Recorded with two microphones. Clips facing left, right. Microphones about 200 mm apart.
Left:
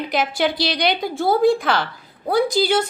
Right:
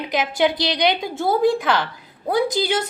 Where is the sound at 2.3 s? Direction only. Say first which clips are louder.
Left 2 dB; 20° right (ahead or behind).